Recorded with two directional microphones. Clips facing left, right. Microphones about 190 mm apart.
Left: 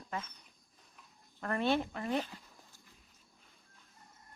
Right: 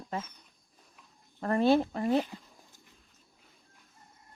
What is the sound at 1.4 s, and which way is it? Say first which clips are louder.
Speech: right 7 dB; 35° right (ahead or behind).